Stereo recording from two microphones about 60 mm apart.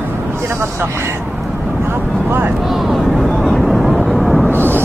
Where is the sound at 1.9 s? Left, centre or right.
Right.